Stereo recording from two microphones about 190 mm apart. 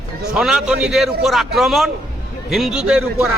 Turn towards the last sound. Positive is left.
turn(degrees=-5)  # may be behind; listen again after turning